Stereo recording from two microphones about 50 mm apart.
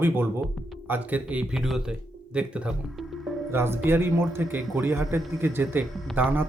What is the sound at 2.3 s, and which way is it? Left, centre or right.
Speech, right.